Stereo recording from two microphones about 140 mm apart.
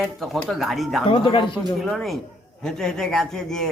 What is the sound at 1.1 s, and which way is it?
Speech, 35° left (ahead or behind).